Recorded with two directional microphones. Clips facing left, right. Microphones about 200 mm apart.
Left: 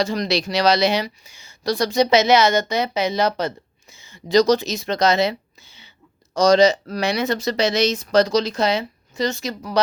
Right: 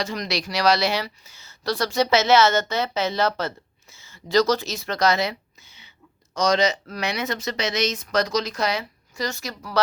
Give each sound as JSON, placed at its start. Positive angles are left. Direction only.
{"t": 0.0, "sound": "speech", "side_deg": 30}